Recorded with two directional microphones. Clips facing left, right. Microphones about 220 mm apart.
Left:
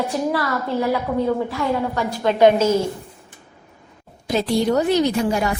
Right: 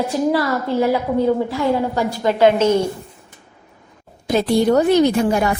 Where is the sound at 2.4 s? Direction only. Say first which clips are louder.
Right 1 dB; 5° left (ahead or behind).